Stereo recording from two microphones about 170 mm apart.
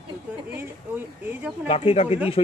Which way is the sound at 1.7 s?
35° left (ahead or behind).